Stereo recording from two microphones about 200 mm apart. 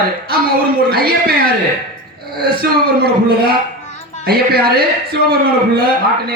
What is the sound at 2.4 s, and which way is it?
A man's voice, 50° right (ahead or behind).